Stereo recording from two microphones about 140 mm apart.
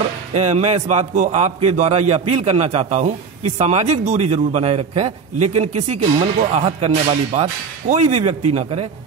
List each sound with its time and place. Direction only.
0.3 s a man's voice: 60° right (ahead or behind)